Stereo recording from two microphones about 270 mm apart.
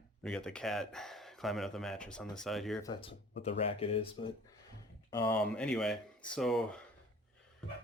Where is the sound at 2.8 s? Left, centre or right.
Centre.